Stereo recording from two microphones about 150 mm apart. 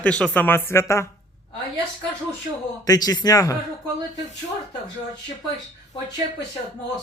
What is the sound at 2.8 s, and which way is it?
Speech, 25° left (ahead or behind).